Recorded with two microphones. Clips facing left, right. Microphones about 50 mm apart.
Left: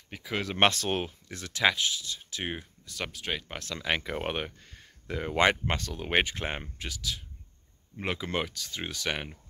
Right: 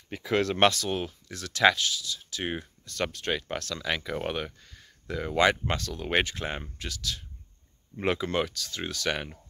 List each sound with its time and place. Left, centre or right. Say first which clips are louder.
0.1 s speech: right 7 dB; centre
0.6 s speech: right 1 dB; left
2.4 s speech: right 3 dB; centre
3.5 s speech: even; left